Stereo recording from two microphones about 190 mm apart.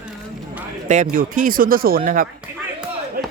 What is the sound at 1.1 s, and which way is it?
Speech, 45° right (ahead or behind).